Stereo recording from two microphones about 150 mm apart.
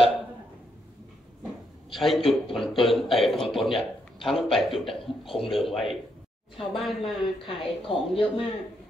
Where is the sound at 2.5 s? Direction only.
Centre (ahead or behind).